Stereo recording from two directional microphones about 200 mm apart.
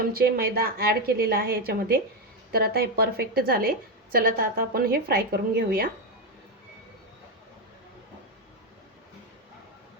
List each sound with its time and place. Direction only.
0.0 s a woman's voice: 50° right (ahead or behind)